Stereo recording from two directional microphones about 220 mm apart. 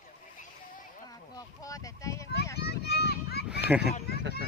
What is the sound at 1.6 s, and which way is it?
Speech, 15° left (ahead or behind).